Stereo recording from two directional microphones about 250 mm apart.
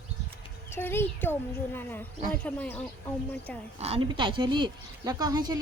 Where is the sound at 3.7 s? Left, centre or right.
Right.